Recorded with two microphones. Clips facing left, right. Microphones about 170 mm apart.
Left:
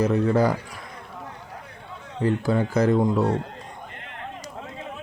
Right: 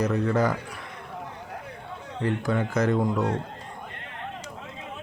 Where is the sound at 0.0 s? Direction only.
25° left (ahead or behind).